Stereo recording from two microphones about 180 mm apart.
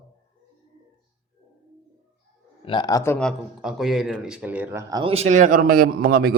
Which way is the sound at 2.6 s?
25° left (ahead or behind).